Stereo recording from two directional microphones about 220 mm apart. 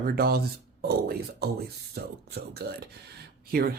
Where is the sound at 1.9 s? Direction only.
45° right (ahead or behind).